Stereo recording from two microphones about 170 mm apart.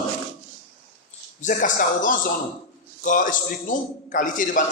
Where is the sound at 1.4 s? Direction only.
50° left (ahead or behind).